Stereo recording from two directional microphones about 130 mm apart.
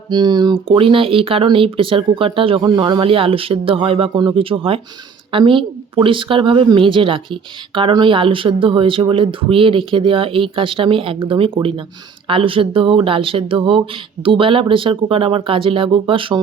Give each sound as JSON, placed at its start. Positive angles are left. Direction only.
{"t": 0.1, "sound": "a woman's voice", "side_deg": -35}